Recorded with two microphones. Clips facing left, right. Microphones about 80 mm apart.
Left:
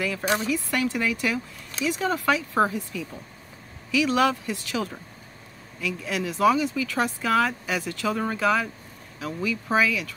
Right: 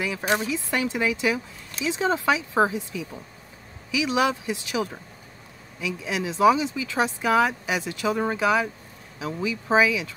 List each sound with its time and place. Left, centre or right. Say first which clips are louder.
0.0 s speech: even; centre